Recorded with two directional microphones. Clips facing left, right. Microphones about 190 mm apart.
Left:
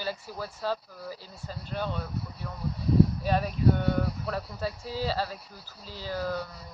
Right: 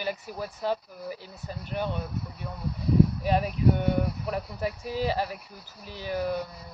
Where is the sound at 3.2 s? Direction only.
15° right (ahead or behind).